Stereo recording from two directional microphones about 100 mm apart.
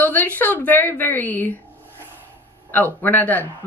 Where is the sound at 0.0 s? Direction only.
20° left (ahead or behind).